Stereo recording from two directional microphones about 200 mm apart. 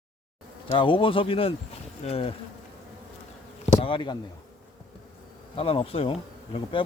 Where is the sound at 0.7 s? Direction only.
25° left (ahead or behind).